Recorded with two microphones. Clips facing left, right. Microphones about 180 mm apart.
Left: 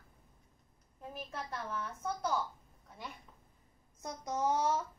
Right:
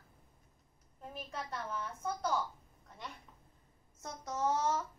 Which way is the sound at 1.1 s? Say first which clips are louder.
Even; centre (ahead or behind).